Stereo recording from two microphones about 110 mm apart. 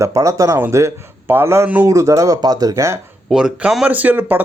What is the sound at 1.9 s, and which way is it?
Speech, 30° right (ahead or behind).